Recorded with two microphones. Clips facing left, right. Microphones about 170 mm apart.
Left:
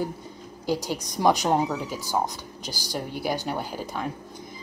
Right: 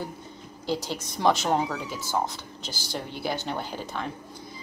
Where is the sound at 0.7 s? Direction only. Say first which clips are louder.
Left 2 dB; 15° left (ahead or behind).